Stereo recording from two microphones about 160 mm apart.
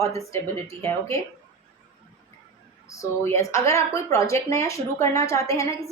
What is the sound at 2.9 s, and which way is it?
A woman's voice, 20° left (ahead or behind).